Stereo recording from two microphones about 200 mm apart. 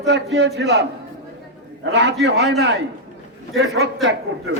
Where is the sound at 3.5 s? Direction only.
55° right (ahead or behind).